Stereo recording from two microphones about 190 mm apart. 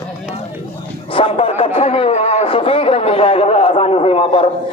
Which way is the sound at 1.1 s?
30° left (ahead or behind).